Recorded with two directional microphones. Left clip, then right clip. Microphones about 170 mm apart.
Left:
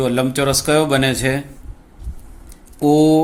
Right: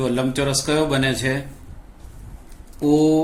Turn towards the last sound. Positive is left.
turn(degrees=55)  # may be behind; listen again after turning